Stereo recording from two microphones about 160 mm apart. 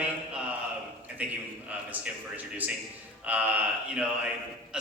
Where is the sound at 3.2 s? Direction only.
10° right (ahead or behind).